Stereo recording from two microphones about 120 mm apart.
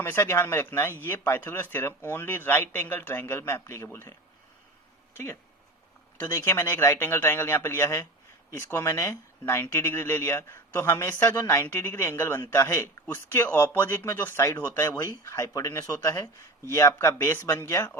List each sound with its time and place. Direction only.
0.0 s a man's voice: 20° left (ahead or behind)
5.1 s speech: 20° left (ahead or behind)